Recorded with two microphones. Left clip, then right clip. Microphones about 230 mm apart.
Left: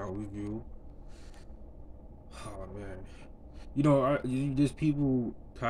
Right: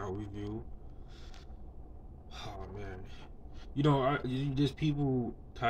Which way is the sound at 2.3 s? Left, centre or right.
Centre.